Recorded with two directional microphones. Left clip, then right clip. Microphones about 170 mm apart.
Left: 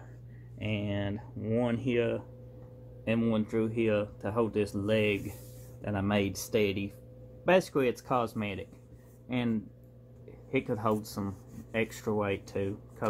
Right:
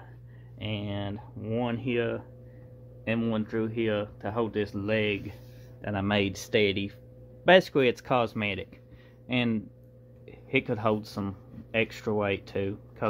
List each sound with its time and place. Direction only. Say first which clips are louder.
0.6 s speech: even; 5° left (ahead or behind); by 13.1 s 15° right (ahead or behind)